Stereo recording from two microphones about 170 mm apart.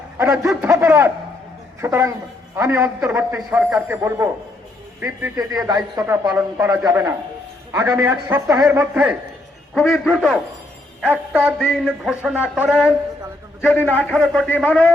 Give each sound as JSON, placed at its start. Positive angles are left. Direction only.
{"t": 0.2, "sound": "speech", "side_deg": -15}
{"t": 5.4, "sound": "a man's voice", "side_deg": -25}
{"t": 9.7, "sound": "speech", "side_deg": 0}
{"t": 13.7, "sound": "a man's voice", "side_deg": 10}